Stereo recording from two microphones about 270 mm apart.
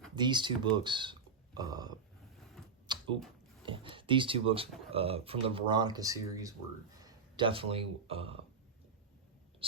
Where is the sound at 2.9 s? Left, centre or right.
Centre.